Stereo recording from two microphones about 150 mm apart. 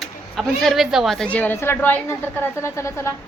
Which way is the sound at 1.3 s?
10° left (ahead or behind).